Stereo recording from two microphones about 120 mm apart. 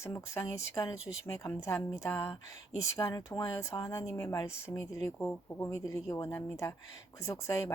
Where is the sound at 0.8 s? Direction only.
25° left (ahead or behind).